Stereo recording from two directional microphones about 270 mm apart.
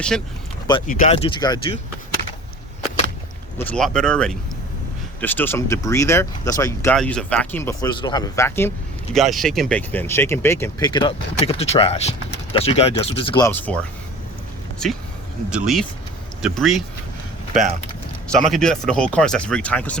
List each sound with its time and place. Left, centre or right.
0.9 s speech: left
3.6 s speech: centre
15.4 s speech: centre
18.3 s speech: centre